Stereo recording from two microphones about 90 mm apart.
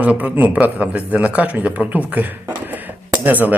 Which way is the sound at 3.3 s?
20° right (ahead or behind).